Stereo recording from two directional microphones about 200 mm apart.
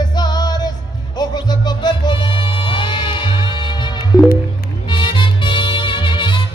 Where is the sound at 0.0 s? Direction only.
20° left (ahead or behind).